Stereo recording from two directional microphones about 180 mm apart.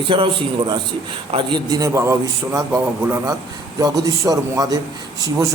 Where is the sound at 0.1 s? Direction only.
30° right (ahead or behind).